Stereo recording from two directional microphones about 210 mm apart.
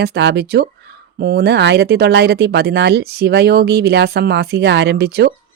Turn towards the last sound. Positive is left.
turn(degrees=-50)  # may be behind; listen again after turning